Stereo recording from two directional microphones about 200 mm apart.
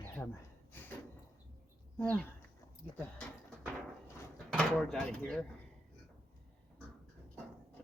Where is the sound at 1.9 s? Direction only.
10° left (ahead or behind).